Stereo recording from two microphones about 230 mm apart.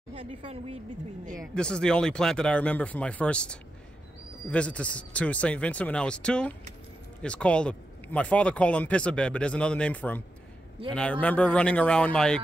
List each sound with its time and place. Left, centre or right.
0.1 s a woman's voice: right
1.4 s speech: centre